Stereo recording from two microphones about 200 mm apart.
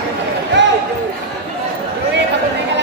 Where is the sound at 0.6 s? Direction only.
60° right (ahead or behind).